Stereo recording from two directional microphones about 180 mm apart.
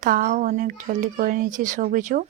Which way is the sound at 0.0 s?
50° right (ahead or behind).